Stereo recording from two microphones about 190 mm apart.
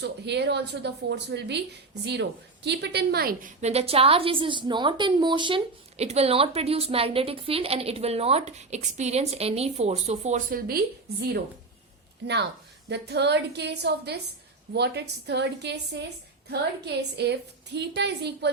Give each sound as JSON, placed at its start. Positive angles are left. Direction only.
{"t": 0.0, "sound": "a woman's voice", "side_deg": -65}
{"t": 2.6, "sound": "a woman's voice", "side_deg": -60}
{"t": 3.6, "sound": "a woman's voice", "side_deg": -35}
{"t": 12.9, "sound": "a woman's voice", "side_deg": -60}